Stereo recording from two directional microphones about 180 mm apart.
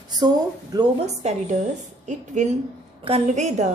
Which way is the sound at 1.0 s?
40° right (ahead or behind).